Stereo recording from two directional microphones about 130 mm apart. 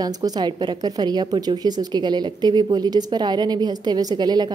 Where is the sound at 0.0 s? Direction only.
30° right (ahead or behind).